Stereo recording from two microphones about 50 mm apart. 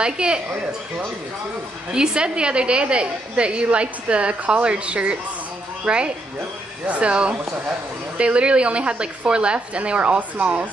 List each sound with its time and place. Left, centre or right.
0.0 s a woman's voice: centre
1.9 s a woman's voice: centre